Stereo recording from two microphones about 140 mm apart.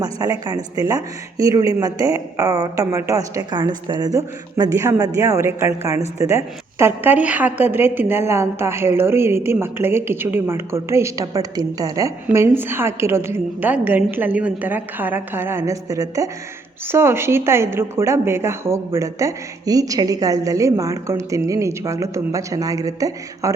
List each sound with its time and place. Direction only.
0.0 s a woman's voice: 25° right (ahead or behind)